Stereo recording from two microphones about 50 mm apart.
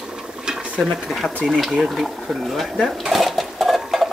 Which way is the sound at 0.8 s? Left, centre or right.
Centre.